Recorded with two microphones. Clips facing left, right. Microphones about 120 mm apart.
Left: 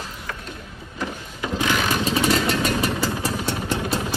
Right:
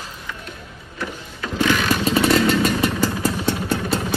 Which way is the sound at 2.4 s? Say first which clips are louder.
Right 3 dB; centre (ahead or behind).